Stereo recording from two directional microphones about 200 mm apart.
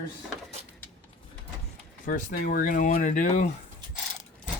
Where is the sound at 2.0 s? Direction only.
45° left (ahead or behind).